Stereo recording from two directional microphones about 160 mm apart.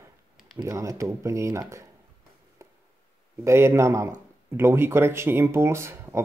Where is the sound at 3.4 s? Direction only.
15° right (ahead or behind).